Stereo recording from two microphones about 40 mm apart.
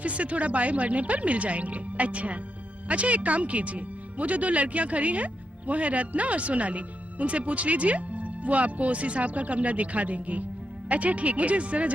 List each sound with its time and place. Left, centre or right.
0.0 s speech: right